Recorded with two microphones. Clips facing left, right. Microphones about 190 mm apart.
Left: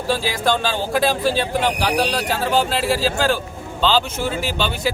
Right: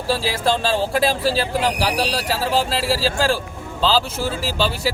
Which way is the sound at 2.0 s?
35° right (ahead or behind).